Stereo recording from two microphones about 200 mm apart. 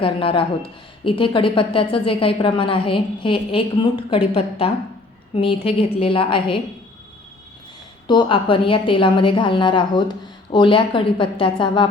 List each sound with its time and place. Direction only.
0.0 s speech: 25° left (ahead or behind)
8.0 s speech: 25° left (ahead or behind)